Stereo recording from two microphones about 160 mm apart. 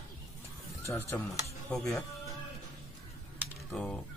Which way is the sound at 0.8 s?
15° left (ahead or behind).